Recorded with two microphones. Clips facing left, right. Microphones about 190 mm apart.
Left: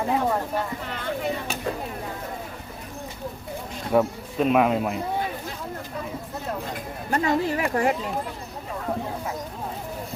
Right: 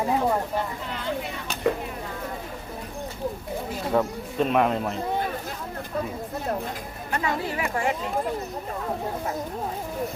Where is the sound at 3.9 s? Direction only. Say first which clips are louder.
Left 3 dB; 5° left (ahead or behind).